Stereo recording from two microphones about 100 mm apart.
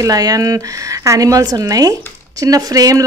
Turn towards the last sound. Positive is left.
turn(degrees=-35)  # may be behind; listen again after turning